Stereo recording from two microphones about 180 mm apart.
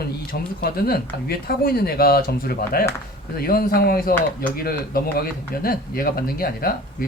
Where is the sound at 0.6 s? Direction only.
55° left (ahead or behind).